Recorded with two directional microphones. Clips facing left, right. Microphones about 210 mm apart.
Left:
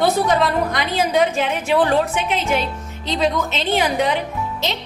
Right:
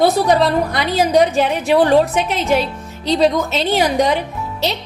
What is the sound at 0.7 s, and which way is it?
A woman's voice, 40° right (ahead or behind).